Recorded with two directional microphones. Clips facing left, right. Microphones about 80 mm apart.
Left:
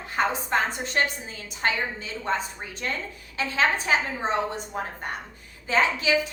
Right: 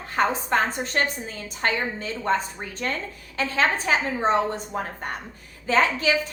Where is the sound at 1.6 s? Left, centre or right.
Right.